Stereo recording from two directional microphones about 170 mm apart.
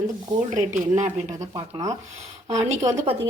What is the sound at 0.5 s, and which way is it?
Speech, 45° right (ahead or behind).